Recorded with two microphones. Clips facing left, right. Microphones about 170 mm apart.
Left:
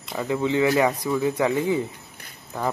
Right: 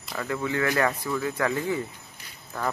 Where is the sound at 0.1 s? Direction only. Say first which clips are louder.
Left 5 dB; 20° left (ahead or behind).